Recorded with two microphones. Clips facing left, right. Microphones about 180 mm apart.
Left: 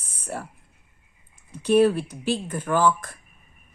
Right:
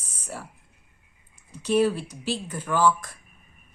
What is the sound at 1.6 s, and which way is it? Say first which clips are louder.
A woman's voice: left 4 dB; 55° left (ahead or behind).